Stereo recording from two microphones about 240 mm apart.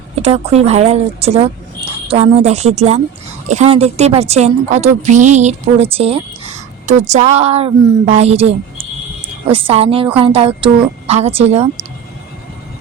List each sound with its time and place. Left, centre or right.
0.2 s speech: right